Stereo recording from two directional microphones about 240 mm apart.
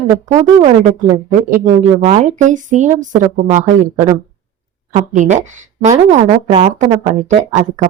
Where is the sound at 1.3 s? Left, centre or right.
Right.